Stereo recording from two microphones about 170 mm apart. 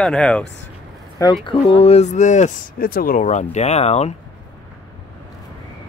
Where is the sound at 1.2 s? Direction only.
30° left (ahead or behind).